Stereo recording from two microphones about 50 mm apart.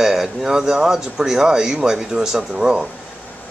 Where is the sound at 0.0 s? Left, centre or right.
Centre.